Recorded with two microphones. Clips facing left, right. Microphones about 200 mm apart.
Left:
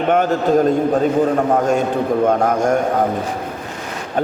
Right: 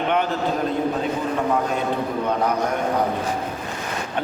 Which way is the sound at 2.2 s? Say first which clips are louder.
Left 6 dB; 45° left (ahead or behind).